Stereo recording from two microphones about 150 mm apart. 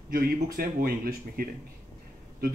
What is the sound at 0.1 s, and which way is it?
Speech, 85° right.